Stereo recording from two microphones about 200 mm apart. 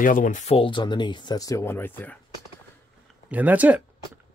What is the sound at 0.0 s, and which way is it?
Speech, 40° left (ahead or behind).